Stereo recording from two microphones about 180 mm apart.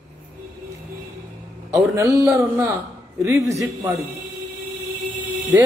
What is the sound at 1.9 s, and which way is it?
A man's voice, 20° right (ahead or behind).